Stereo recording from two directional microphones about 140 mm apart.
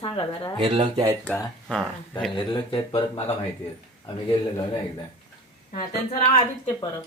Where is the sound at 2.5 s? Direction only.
35° left (ahead or behind).